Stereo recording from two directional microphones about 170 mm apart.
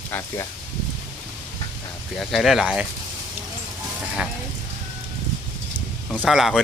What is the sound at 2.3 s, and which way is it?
Speech, centre (ahead or behind).